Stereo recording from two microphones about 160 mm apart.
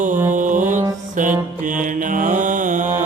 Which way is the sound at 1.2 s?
55° right (ahead or behind).